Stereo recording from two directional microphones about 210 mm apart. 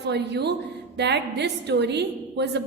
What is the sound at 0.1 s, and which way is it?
A woman's voice, 55° right (ahead or behind).